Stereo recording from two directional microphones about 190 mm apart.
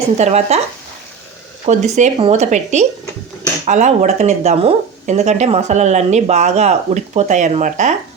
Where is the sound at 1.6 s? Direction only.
35° right (ahead or behind).